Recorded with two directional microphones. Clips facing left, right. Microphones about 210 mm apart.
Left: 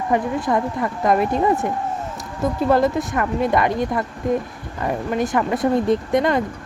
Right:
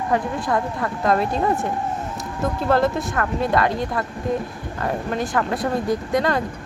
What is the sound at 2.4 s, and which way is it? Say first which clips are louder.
Speech: left 2 dB; 15° left (ahead or behind).